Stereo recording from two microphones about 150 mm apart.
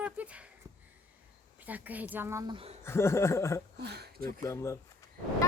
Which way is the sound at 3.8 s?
90° right.